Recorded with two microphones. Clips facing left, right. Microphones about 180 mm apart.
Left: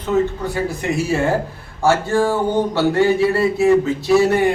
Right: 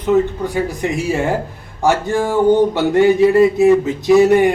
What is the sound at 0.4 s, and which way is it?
Speech, 15° right (ahead or behind).